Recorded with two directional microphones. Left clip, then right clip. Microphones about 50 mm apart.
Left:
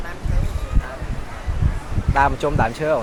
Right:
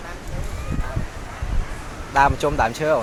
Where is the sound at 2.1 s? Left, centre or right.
Centre.